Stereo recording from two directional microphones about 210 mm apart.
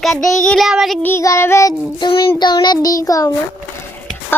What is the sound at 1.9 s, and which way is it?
Child singing, 25° left (ahead or behind).